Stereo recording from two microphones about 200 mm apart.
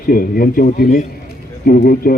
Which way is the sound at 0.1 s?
45° left (ahead or behind).